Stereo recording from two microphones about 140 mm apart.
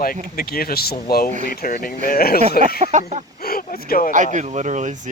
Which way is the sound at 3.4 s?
90° left.